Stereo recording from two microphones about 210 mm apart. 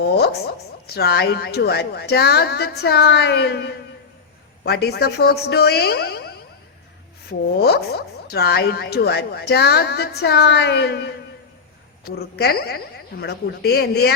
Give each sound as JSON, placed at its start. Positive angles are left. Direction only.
{"t": 0.9, "sound": "speech", "side_deg": 50}